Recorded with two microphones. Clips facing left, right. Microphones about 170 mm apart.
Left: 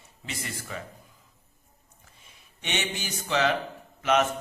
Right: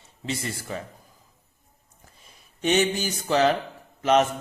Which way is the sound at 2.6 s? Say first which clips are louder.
Right 10 dB; 40° right (ahead or behind).